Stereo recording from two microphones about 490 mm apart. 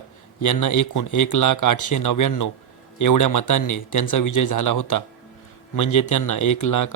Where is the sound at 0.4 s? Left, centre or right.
Left.